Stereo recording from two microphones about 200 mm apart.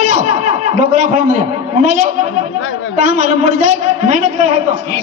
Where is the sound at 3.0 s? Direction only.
35° right (ahead or behind).